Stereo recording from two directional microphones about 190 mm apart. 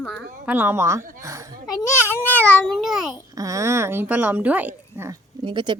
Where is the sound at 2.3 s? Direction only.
10° left (ahead or behind).